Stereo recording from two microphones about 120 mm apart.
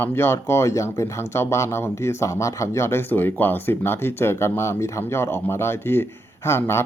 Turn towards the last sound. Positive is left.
turn(degrees=20)  # may be behind; listen again after turning